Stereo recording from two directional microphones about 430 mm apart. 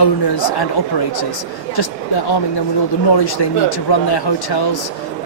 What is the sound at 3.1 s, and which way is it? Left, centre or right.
Speech, left.